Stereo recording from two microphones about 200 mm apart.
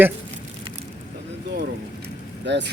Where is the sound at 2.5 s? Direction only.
60° right (ahead or behind).